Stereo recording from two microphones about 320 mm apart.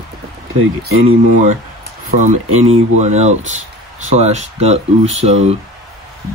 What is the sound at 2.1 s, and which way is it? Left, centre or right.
Speech, right.